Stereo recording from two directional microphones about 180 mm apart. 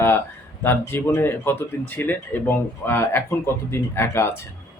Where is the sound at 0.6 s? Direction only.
10° left (ahead or behind).